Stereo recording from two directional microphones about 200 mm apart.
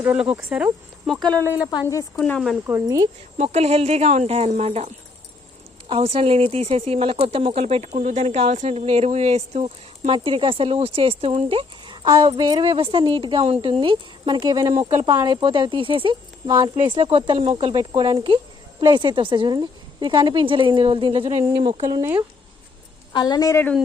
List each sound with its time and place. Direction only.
0.0 s speech: 10° right (ahead or behind)
1.4 s speech: 10° right (ahead or behind)
1.6 s a woman's voice: 15° left (ahead or behind)
2.1 s speech: 5° left (ahead or behind)
2.6 s speech: 15° right (ahead or behind)
3.3 s speech: 30° right (ahead or behind)
5.9 s speech: 30° right (ahead or behind)
21.8 s speech: 15° right (ahead or behind)
23.1 s a woman's voice: 20° left (ahead or behind)